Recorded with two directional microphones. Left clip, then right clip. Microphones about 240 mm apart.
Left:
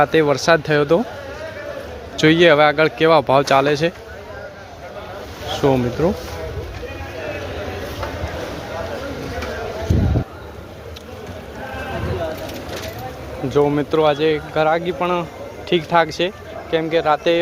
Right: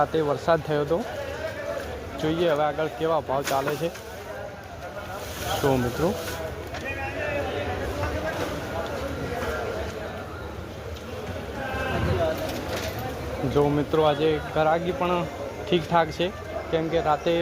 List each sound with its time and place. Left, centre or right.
0.0 s speech: left
2.2 s speech: left
5.6 s speech: centre
13.5 s speech: left